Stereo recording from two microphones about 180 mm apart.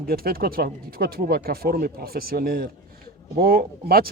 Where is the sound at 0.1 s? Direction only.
55° right (ahead or behind).